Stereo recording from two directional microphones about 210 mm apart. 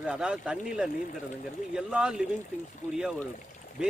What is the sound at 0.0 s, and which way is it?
A man's voice, 5° right (ahead or behind).